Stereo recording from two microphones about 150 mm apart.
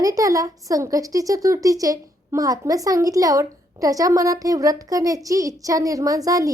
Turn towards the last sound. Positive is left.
turn(degrees=-25)  # may be behind; listen again after turning